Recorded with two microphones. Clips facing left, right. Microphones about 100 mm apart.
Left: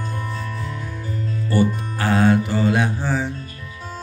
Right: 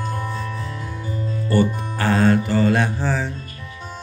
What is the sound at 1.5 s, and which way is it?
Music, 10° left (ahead or behind).